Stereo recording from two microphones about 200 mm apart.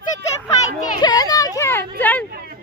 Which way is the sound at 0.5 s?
20° left (ahead or behind).